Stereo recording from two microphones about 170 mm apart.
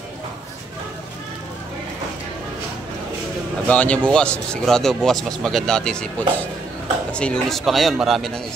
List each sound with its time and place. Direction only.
3.6 s speech: 10° left (ahead or behind)